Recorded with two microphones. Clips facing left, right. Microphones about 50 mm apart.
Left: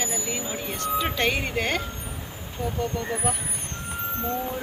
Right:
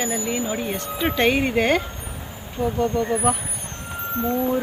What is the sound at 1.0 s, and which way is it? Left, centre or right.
Speech, right.